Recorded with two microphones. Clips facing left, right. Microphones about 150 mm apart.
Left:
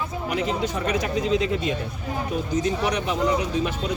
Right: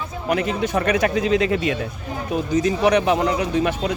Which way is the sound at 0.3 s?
65° right (ahead or behind).